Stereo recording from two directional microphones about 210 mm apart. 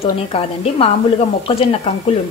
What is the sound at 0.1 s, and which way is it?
A woman's voice, 30° left (ahead or behind).